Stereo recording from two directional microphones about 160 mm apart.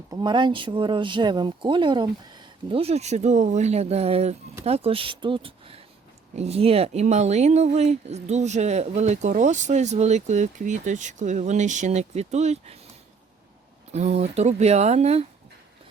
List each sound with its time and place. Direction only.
0.1 s speech: 30° right (ahead or behind); by 12.7 s 45° right (ahead or behind)
13.9 s speech: 45° right (ahead or behind)